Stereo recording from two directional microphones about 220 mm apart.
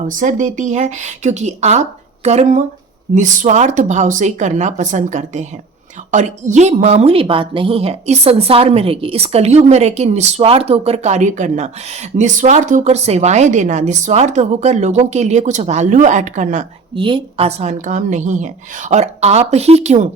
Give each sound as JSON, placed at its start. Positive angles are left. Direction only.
{"t": 0.0, "sound": "a woman's voice", "side_deg": -35}